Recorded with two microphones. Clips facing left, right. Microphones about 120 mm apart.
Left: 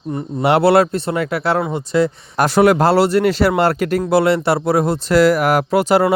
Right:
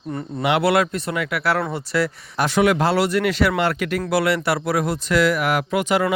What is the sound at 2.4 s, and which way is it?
Speech, 40° left (ahead or behind).